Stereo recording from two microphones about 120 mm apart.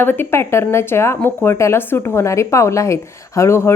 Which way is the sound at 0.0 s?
20° left (ahead or behind).